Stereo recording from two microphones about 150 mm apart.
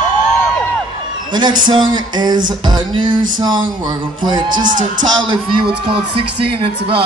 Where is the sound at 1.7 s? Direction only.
30° right (ahead or behind).